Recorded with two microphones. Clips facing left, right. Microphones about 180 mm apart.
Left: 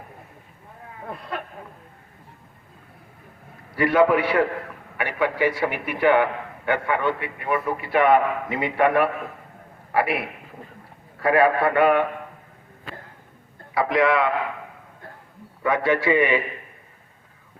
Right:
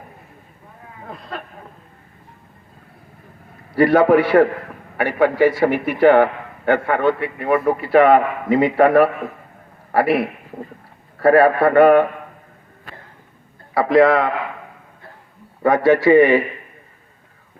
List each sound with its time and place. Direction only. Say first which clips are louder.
3.8 s a man's voice: right 5 dB; 40° right (ahead or behind)
13.7 s a man's voice: right 6 dB; 40° right (ahead or behind)
15.6 s a man's voice: right 7 dB; 40° right (ahead or behind)